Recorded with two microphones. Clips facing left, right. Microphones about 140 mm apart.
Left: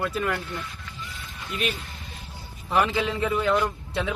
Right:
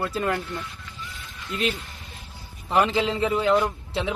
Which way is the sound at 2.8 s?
20° right (ahead or behind).